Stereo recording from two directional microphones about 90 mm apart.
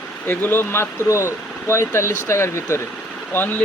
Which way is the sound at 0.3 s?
25° left (ahead or behind).